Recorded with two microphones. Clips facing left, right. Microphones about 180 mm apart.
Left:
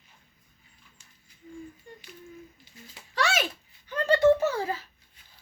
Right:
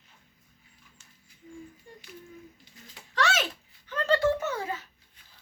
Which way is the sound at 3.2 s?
10° left (ahead or behind).